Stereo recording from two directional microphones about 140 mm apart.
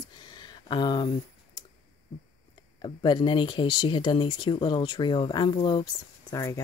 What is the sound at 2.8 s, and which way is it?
Speech, 35° left (ahead or behind).